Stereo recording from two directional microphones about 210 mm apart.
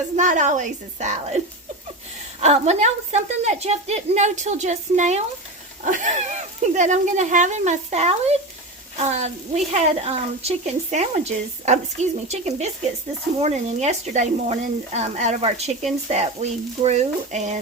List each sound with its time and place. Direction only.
0.2 s speech: 35° right (ahead or behind)
2.4 s speech: 30° right (ahead or behind)